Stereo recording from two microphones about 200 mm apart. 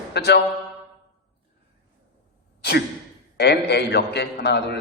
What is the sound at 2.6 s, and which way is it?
Sigh, 55° left (ahead or behind).